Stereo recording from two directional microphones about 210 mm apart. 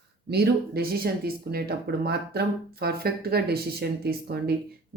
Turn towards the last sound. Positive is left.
turn(degrees=-50)  # may be behind; listen again after turning